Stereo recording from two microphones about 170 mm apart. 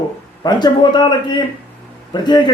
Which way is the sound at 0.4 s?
25° left (ahead or behind).